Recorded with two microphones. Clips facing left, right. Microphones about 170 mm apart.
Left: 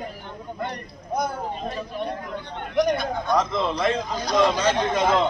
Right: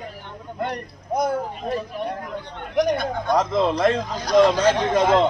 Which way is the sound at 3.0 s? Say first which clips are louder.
Right 2 dB; 45° right (ahead or behind).